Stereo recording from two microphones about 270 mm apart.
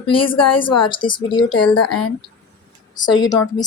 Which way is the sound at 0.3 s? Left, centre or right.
Left.